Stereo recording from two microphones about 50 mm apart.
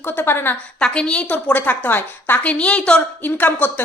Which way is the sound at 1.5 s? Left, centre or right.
Left.